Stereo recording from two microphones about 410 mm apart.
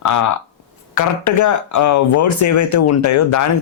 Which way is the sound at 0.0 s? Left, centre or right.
Left.